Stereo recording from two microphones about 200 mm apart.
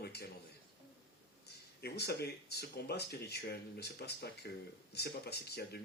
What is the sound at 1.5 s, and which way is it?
A man's voice, 55° left (ahead or behind).